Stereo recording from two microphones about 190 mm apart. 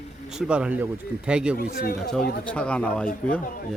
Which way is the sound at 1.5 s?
55° left (ahead or behind).